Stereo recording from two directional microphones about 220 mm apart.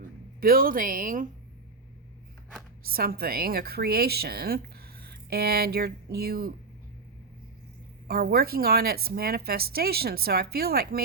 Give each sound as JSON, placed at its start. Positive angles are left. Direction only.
{"t": 0.3, "sound": "speech", "side_deg": -40}
{"t": 2.8, "sound": "a woman's voice", "side_deg": -40}
{"t": 8.0, "sound": "a woman's voice", "side_deg": -45}